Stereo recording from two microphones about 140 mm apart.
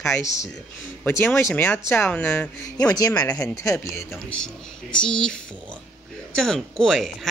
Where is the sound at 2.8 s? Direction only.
30° left (ahead or behind).